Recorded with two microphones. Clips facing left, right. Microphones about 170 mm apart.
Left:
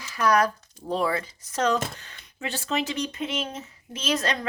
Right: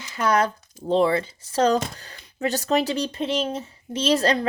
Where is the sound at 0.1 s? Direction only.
25° right (ahead or behind).